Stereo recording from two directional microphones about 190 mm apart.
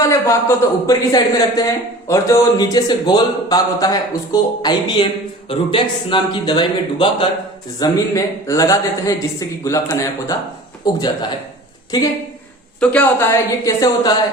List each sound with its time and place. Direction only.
0.0 s a man's voice: 15° left (ahead or behind)
12.8 s a man's voice: 10° left (ahead or behind)
13.7 s a man's voice: 20° left (ahead or behind)